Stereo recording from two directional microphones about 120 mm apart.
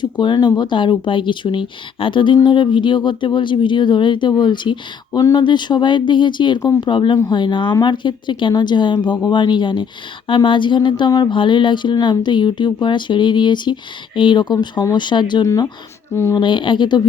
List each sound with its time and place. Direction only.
0.0 s speech: 40° left (ahead or behind)
16.3 s speech: 40° left (ahead or behind)